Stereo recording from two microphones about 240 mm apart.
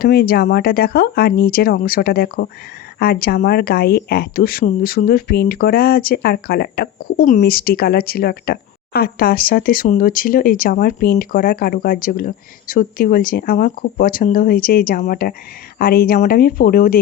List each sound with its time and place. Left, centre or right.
0.0 s speech: left